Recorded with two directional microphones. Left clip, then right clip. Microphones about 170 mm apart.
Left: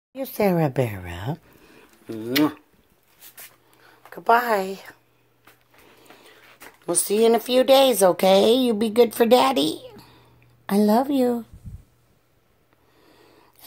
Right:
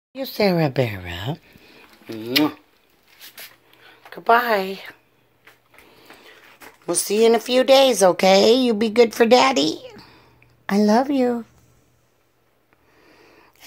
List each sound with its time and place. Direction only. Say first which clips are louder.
0.1 s speech: right 2 dB; 10° left (ahead or behind)
2.1 s speech: right 2 dB; 25° left (ahead or behind)
3.7 s speech: even; centre (ahead or behind)
5.9 s a sound: right 4 dB; 5° left (ahead or behind)
6.9 s speech: right 2 dB; 5° left (ahead or behind)
13.0 s sniff: right 3 dB; centre (ahead or behind)